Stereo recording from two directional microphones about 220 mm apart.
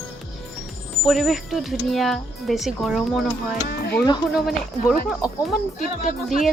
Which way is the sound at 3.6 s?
45° left (ahead or behind).